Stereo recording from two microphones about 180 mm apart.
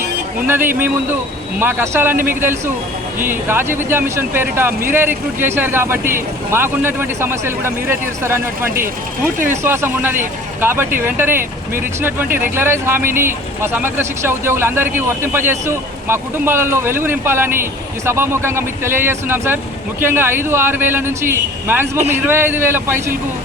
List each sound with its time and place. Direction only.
0.4 s speech: 10° right (ahead or behind)